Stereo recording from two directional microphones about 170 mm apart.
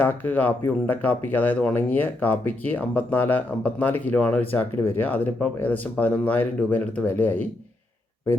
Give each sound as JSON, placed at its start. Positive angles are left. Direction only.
{"t": 0.0, "sound": "speech", "side_deg": 10}